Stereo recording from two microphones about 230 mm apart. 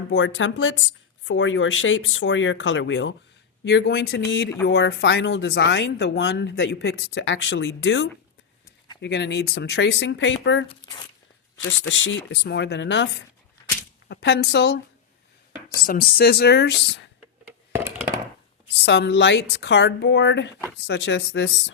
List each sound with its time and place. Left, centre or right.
0.1 s speech: left
10.7 s speech: centre
11.8 s speech: left
14.1 s speech: left
18.9 s speech: left